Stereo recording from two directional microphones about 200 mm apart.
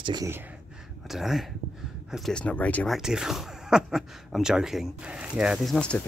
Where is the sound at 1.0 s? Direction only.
Centre (ahead or behind).